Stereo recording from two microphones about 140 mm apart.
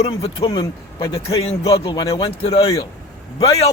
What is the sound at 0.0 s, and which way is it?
Speech, 45° left (ahead or behind).